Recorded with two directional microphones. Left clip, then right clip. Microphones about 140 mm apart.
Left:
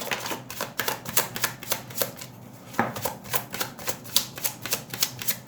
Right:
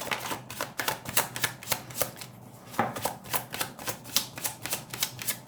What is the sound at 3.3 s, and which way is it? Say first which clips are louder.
Typewriter: left 2 dB; centre (ahead or behind).